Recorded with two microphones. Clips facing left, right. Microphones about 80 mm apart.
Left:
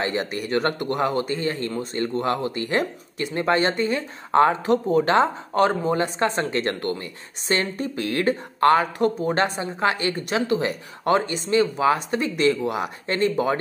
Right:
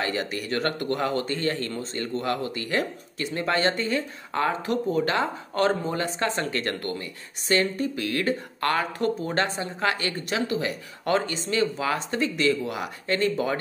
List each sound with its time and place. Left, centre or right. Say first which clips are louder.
0.0 s speech: left 3 dB; left
2.0 s speech: left 4 dB; left